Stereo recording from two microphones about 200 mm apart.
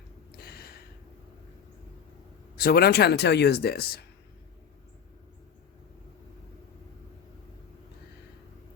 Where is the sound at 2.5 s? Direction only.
50° left (ahead or behind).